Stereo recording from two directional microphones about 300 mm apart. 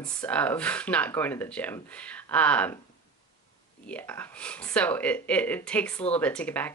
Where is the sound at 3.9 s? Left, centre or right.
Centre.